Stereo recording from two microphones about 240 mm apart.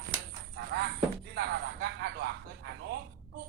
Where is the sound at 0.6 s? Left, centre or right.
Right.